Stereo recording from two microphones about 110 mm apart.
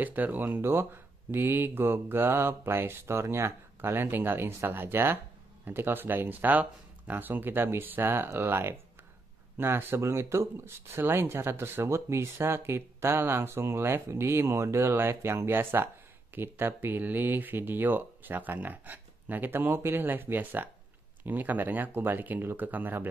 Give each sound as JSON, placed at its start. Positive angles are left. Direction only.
{"t": 0.0, "sound": "speech", "side_deg": -15}